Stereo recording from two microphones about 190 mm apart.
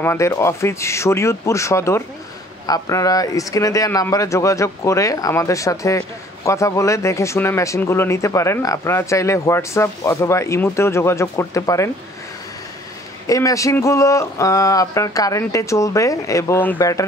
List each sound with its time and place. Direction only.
0.0 s a man's voice: 15° left (ahead or behind)
13.3 s a man's voice: 15° left (ahead or behind)